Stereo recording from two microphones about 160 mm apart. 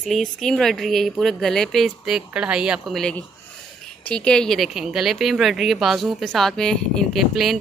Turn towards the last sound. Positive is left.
turn(degrees=0)  # may be behind; listen again after turning